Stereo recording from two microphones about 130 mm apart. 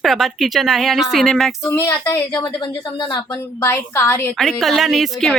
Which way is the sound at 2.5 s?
35° left (ahead or behind).